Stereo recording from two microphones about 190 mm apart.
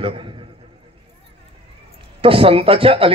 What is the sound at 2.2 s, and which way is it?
Speech, 30° right (ahead or behind).